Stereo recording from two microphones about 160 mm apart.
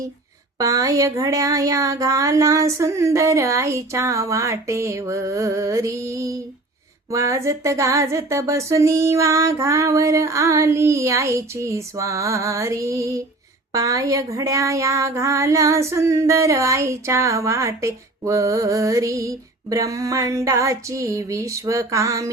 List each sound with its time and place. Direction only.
0.6 s speech: 20° right (ahead or behind)